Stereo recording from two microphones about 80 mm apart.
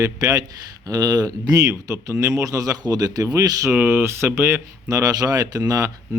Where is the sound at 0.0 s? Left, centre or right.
Right.